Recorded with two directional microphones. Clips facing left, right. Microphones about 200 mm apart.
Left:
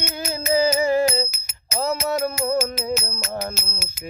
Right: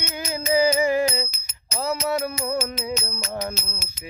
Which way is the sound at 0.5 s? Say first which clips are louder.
Left 1 dB; 15° right (ahead or behind).